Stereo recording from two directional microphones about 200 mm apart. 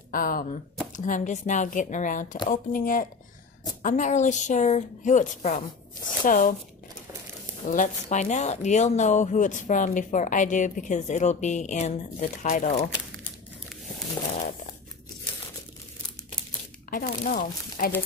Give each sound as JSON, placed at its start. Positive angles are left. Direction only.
{"t": 0.1, "sound": "a woman's voice", "side_deg": 45}
{"t": 7.6, "sound": "a woman's voice", "side_deg": 40}
{"t": 16.9, "sound": "speech", "side_deg": 45}